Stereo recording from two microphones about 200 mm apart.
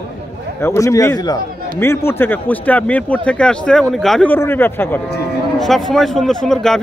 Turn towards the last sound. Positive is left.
turn(degrees=5)  # may be behind; listen again after turning